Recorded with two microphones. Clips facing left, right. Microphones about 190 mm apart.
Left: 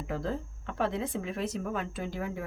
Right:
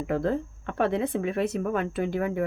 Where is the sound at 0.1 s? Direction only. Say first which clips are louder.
Right 7 dB; 60° right (ahead or behind).